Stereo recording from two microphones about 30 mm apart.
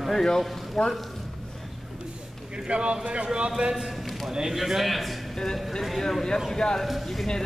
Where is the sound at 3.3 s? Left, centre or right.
Right.